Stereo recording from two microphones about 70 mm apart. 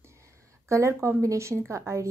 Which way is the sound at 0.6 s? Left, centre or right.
Right.